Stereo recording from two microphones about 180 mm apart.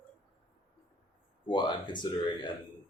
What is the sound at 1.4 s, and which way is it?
Speech, 25° left (ahead or behind).